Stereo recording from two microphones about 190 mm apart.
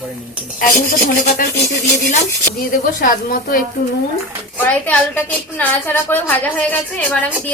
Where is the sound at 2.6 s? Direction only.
45° left (ahead or behind).